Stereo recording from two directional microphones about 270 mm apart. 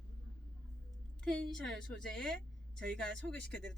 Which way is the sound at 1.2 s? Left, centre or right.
Centre.